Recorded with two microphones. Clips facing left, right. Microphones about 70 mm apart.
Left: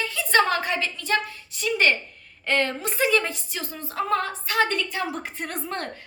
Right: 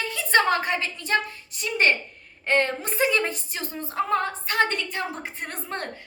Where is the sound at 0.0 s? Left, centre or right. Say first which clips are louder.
Even; right.